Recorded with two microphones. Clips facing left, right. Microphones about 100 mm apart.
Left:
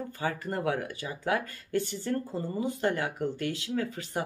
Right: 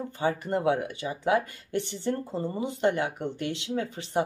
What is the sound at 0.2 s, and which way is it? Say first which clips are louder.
Speech: right 5 dB; 25° right (ahead or behind).